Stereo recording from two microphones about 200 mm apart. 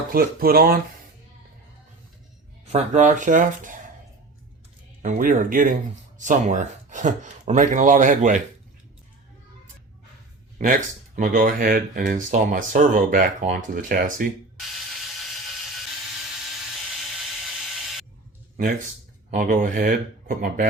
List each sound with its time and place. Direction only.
0.1 s speech: 45° right (ahead or behind)
2.7 s speech: 35° right (ahead or behind)
5.0 s speech: 40° right (ahead or behind)
10.6 s speech: 40° right (ahead or behind)
19.3 s speech: 40° right (ahead or behind)